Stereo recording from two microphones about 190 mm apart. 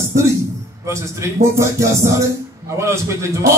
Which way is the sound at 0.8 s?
15° right (ahead or behind).